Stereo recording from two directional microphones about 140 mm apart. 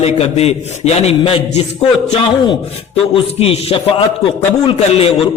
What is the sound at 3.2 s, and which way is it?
A man's voice, 45° left (ahead or behind).